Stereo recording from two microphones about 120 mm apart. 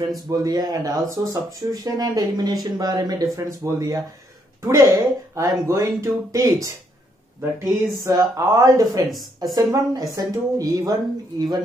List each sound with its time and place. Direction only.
0.1 s speech: 30° right (ahead or behind)
8.0 s speech: 30° right (ahead or behind)
9.1 s speech: centre (ahead or behind)
9.6 s speech: 30° right (ahead or behind)